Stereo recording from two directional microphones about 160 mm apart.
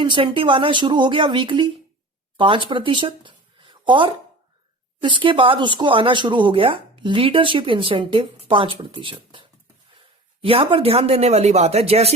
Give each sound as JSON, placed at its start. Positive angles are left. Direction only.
{"t": 0.0, "sound": "speech", "side_deg": -30}